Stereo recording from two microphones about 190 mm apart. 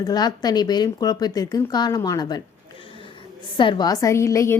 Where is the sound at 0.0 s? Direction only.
20° left (ahead or behind).